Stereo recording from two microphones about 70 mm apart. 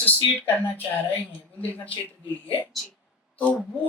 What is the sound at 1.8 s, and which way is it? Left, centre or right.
Speech, left.